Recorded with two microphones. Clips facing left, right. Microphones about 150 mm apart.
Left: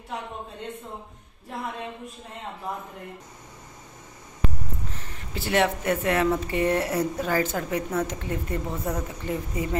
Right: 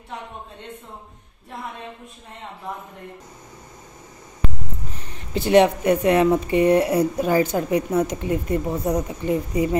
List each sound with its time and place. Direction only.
4.9 s speech: 20° right (ahead or behind)